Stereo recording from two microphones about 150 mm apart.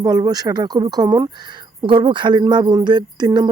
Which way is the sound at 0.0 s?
25° right (ahead or behind).